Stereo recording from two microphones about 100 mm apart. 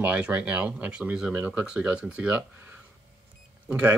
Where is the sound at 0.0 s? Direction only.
15° right (ahead or behind).